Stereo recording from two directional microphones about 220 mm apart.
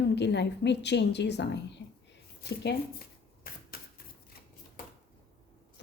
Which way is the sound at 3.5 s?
40° left (ahead or behind).